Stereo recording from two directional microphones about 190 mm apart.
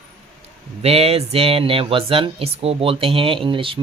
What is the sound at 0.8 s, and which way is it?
Speech, 30° right (ahead or behind).